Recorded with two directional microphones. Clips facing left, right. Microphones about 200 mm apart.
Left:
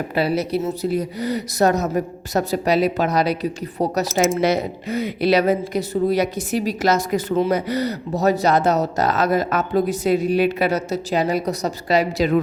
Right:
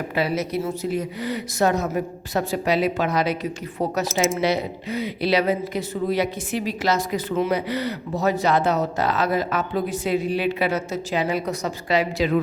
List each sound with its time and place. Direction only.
0.1 s speech: 35° left (ahead or behind)
4.1 s speech: centre (ahead or behind)
4.4 s a woman's voice: 45° left (ahead or behind)